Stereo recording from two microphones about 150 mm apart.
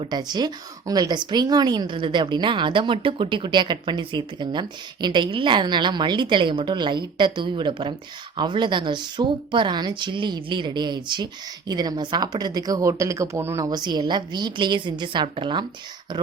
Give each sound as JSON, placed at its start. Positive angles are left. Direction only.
{"t": 0.0, "sound": "a woman's voice", "side_deg": -30}